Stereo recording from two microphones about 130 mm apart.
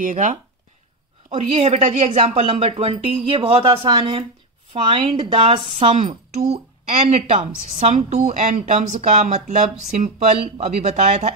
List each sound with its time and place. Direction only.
0.0 s speech: 90° right
1.3 s a woman's voice: 50° right (ahead or behind)